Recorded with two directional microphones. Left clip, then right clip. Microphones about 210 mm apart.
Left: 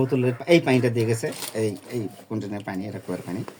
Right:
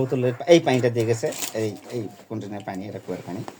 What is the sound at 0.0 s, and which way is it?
Speech, 10° left (ahead or behind).